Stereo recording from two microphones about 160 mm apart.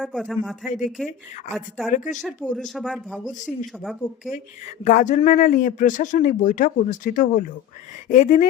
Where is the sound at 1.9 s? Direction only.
50° left (ahead or behind).